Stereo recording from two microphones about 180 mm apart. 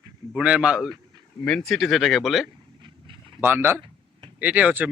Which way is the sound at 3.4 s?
15° right (ahead or behind).